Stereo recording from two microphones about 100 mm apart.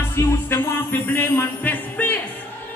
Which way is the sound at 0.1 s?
25° left (ahead or behind).